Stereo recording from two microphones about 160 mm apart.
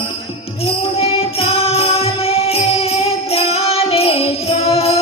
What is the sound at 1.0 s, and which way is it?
Music, 40° left (ahead or behind).